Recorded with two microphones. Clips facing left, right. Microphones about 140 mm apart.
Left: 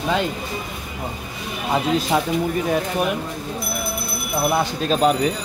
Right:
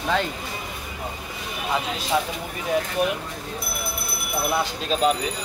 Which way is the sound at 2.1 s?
55° left (ahead or behind).